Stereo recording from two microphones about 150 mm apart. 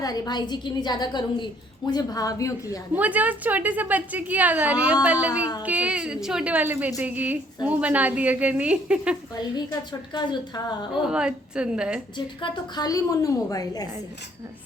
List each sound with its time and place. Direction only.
0.0 s a woman's voice: 25° left (ahead or behind)
2.9 s a woman's voice: 10° right (ahead or behind)
10.1 s a woman's voice: 30° left (ahead or behind)
11.0 s a woman's voice: 5° right (ahead or behind)
12.1 s a woman's voice: 30° left (ahead or behind)